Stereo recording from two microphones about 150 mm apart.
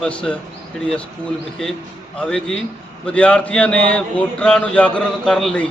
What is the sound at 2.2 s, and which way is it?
Speech, 5° left (ahead or behind).